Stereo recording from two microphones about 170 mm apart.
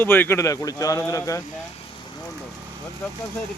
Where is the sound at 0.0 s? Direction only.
10° left (ahead or behind).